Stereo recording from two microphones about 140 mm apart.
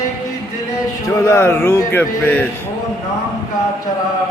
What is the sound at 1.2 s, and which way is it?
A man's voice, 20° left (ahead or behind).